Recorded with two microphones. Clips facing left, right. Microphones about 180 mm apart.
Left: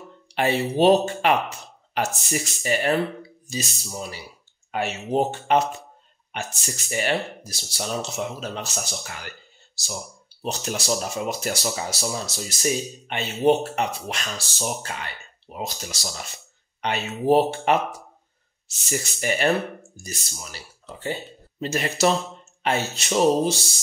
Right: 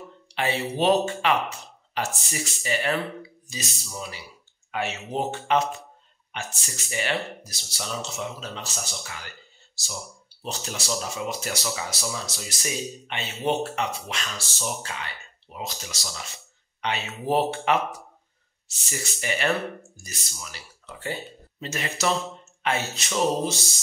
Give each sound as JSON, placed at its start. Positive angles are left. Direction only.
{"t": 0.3, "sound": "speech", "side_deg": 45}
{"t": 10.4, "sound": "speech", "side_deg": 50}
{"t": 15.5, "sound": "speech", "side_deg": 35}
{"t": 18.9, "sound": "speech", "side_deg": 45}